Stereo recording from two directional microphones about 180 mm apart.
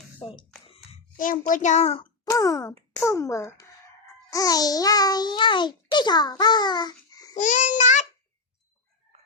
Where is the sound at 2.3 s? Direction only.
20° left (ahead or behind).